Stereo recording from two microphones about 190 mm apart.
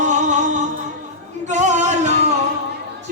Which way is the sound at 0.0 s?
40° right (ahead or behind).